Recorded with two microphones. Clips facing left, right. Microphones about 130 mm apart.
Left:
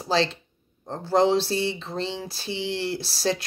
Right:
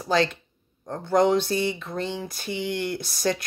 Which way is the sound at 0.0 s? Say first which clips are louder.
Right 1 dB; 25° left (ahead or behind).